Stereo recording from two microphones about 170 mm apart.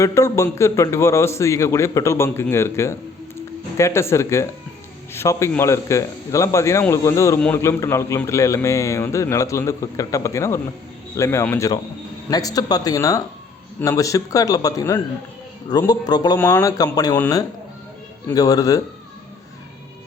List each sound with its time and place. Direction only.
0.0 s a man's voice: 15° left (ahead or behind)